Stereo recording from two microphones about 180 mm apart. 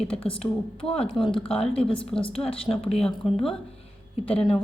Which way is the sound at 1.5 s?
30° left (ahead or behind).